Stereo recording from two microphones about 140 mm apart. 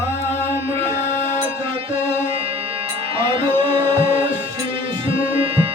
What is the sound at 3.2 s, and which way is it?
Music, 40° right (ahead or behind).